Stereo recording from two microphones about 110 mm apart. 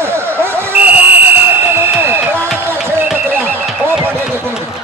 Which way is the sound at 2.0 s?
20° right (ahead or behind).